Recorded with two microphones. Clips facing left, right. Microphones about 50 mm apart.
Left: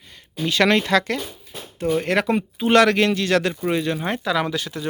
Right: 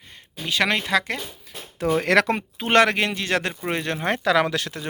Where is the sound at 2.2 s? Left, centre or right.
Right.